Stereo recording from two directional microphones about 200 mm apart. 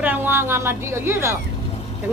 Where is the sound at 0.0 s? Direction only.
10° right (ahead or behind).